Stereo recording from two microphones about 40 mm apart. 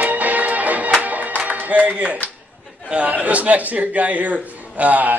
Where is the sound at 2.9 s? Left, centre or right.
Right.